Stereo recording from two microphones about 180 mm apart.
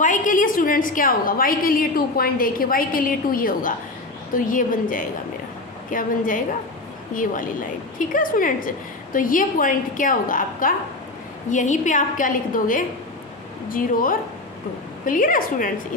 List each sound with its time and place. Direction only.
0.0 s a woman's voice: 45° left (ahead or behind)